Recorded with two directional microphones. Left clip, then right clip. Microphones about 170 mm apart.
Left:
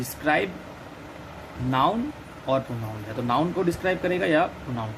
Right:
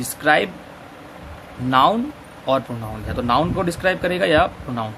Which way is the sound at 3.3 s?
40° right (ahead or behind).